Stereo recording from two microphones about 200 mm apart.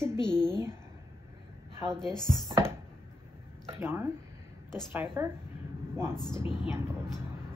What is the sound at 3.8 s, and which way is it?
Speech, 10° right (ahead or behind).